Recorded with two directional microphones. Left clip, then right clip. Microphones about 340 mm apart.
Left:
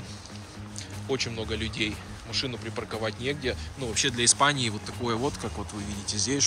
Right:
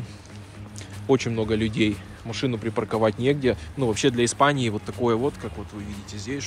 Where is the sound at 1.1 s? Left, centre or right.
Centre.